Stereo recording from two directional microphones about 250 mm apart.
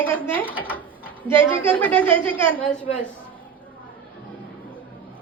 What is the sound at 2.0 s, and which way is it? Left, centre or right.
Speech, right.